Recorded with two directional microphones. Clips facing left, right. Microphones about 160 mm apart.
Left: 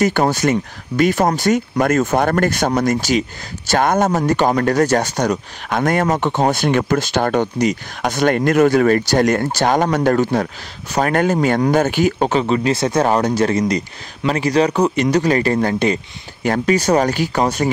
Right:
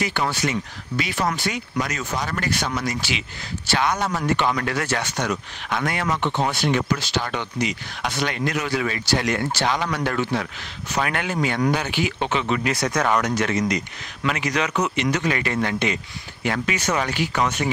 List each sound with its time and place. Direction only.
0.0 s speech: 45° left (ahead or behind)